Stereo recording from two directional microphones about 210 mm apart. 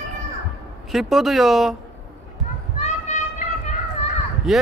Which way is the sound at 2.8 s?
35° left (ahead or behind).